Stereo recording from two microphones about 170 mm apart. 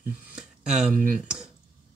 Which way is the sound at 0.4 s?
5° right (ahead or behind).